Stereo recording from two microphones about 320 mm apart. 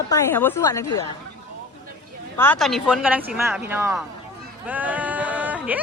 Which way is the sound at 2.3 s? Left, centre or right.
Centre.